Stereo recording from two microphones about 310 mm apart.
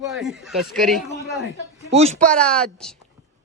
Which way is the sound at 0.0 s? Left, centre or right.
Centre.